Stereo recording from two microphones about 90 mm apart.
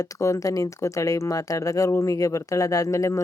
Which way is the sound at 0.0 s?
35° left (ahead or behind).